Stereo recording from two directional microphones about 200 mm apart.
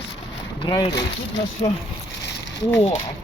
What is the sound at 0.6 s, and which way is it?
Speech, 20° left (ahead or behind).